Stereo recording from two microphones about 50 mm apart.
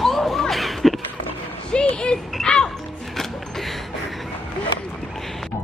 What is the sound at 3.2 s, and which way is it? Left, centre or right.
Music, centre.